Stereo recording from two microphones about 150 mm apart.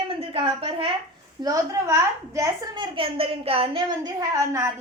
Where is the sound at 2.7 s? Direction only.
35° right (ahead or behind).